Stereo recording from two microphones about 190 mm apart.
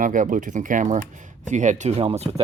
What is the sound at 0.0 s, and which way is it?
Speech, 45° right (ahead or behind).